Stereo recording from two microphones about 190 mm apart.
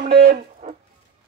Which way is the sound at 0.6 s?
40° right (ahead or behind).